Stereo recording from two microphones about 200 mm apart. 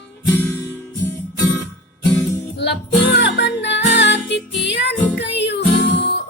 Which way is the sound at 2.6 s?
60° left (ahead or behind).